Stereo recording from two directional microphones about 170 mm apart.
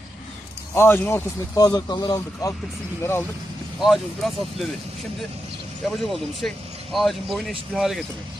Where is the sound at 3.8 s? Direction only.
Centre (ahead or behind).